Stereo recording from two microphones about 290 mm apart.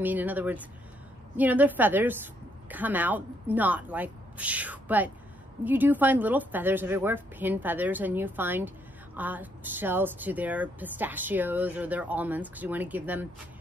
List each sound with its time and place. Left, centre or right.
0.0 s a woman's voice: centre